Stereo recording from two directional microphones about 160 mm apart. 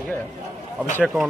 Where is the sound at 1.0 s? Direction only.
Centre (ahead or behind).